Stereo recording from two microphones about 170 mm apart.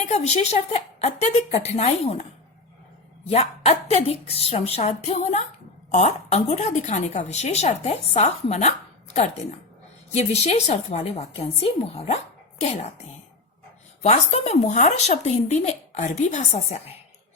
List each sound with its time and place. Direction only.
0.1 s speech: 40° left (ahead or behind)
3.2 s a woman's voice: 40° left (ahead or behind)
14.0 s speech: 40° left (ahead or behind)